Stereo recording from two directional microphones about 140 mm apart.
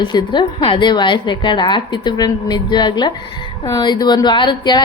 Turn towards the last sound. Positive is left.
turn(degrees=35)  # may be behind; listen again after turning